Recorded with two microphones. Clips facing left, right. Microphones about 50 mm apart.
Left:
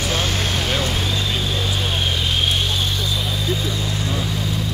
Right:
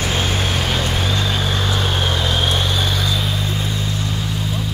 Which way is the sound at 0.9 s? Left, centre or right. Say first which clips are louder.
Right 2 dB; right.